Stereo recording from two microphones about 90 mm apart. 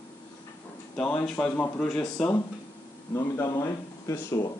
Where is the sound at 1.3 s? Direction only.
10° left (ahead or behind).